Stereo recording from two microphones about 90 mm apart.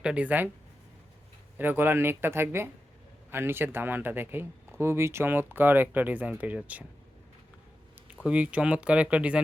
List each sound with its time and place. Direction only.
0.0 s speech: 15° right (ahead or behind)
1.5 s speech: 20° right (ahead or behind)
8.0 s speech: 15° right (ahead or behind)